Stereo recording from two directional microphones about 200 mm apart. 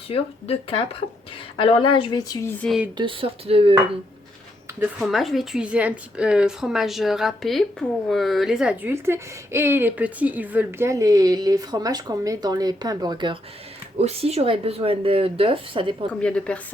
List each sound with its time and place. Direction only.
0.1 s speech: 30° left (ahead or behind); by 2.7 s 10° left (ahead or behind)
3.0 s speech: 25° right (ahead or behind)
4.9 s a woman's voice: centre (ahead or behind); by 16.0 s 25° right (ahead or behind)
16.2 s a woman's voice: 5° left (ahead or behind)